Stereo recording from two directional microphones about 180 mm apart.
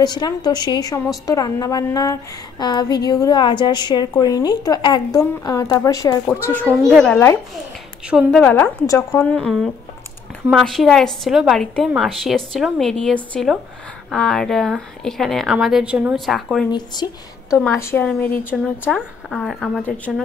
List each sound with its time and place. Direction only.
0.0 s a woman's voice: 25° left (ahead or behind)
6.6 s a child's voice: 15° right (ahead or behind)
6.9 s speech: centre (ahead or behind)
8.3 s a woman's voice: 5° left (ahead or behind)
9.2 s speech: 5° left (ahead or behind)
16.7 s a woman's voice: 25° left (ahead or behind)
18.9 s speech: centre (ahead or behind)